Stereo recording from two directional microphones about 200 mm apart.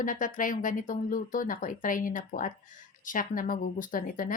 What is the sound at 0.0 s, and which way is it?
A woman's voice, 40° left (ahead or behind).